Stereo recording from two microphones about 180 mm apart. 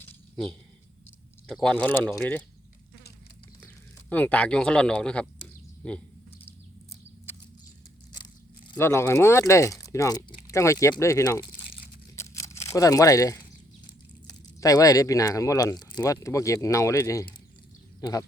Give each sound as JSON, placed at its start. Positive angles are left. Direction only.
{"t": 1.6, "sound": "speech", "side_deg": 5}
{"t": 4.1, "sound": "speech", "side_deg": 10}
{"t": 8.1, "sound": "crunch", "side_deg": 25}
{"t": 8.7, "sound": "speech", "side_deg": 15}
{"t": 12.1, "sound": "a sound", "side_deg": 15}
{"t": 14.6, "sound": "speech", "side_deg": 20}